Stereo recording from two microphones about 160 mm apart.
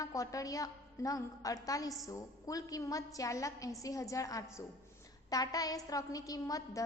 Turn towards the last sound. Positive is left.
turn(degrees=20)  # may be behind; listen again after turning